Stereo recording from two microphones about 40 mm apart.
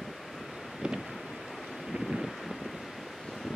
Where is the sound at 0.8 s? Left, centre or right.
Right.